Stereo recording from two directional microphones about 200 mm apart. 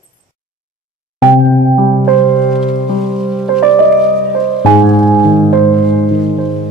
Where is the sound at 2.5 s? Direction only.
Centre (ahead or behind).